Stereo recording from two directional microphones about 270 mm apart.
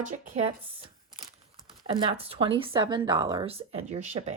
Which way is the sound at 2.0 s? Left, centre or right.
Centre.